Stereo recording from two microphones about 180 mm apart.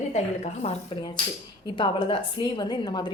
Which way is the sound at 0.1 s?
35° left (ahead or behind).